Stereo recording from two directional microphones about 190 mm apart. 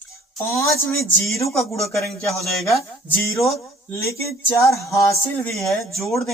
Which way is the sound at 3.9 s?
15° left (ahead or behind).